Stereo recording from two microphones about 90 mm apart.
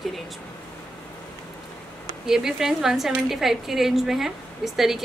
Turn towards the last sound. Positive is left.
turn(degrees=-5)  # may be behind; listen again after turning